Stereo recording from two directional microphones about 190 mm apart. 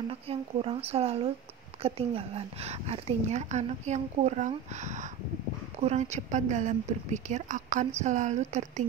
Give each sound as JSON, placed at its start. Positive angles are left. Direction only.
{"t": 0.1, "sound": "speech", "side_deg": -30}